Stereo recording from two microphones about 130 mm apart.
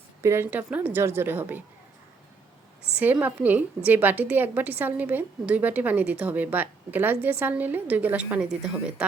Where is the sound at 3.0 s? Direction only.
10° right (ahead or behind).